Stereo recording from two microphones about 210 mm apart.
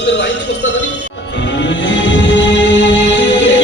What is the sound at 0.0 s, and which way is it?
Music, 55° left (ahead or behind).